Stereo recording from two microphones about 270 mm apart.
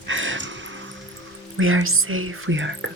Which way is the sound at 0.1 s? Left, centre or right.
Right.